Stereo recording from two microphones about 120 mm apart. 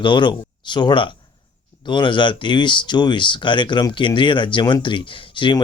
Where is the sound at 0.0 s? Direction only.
40° left (ahead or behind).